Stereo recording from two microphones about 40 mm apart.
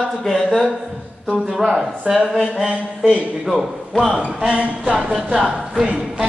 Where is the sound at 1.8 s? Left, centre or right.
Centre.